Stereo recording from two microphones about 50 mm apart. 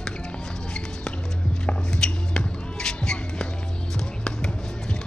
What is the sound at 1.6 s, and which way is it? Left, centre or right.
Music, centre.